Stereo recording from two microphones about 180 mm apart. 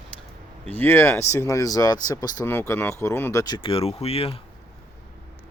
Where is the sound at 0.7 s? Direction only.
10° left (ahead or behind); by 4.4 s 35° left (ahead or behind).